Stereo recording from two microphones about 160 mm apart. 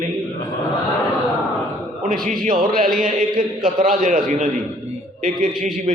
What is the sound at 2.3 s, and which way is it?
A man's voice, 55° right (ahead or behind).